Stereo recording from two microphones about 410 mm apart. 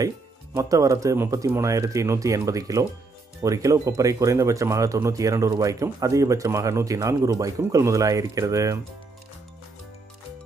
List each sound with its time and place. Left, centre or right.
0.6 s speech: centre